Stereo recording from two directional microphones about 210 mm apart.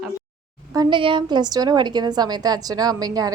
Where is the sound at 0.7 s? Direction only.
20° right (ahead or behind).